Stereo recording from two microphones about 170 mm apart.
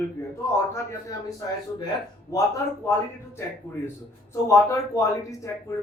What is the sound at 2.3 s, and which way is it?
Speech, 20° left (ahead or behind).